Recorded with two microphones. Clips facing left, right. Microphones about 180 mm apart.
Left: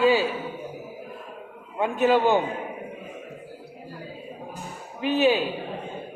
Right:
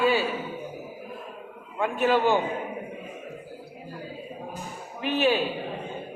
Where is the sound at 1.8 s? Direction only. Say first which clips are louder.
Left 2 dB; 15° left (ahead or behind).